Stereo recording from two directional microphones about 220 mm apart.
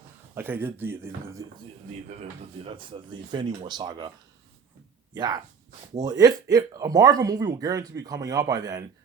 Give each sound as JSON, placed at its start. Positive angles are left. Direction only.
{"t": 0.3, "sound": "speech", "side_deg": -10}
{"t": 2.0, "sound": "speech", "side_deg": -30}
{"t": 5.1, "sound": "speech", "side_deg": -20}